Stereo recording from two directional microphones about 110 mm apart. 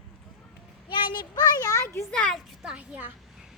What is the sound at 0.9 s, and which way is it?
Child singing, 45° left (ahead or behind).